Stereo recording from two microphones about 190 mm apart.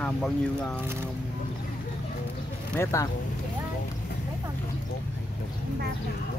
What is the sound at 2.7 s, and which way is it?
Speech, 15° left (ahead or behind).